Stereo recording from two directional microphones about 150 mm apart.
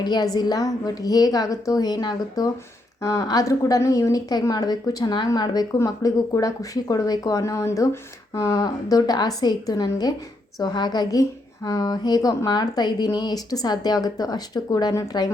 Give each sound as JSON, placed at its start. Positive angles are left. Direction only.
{"t": 0.0, "sound": "a woman's voice", "side_deg": 30}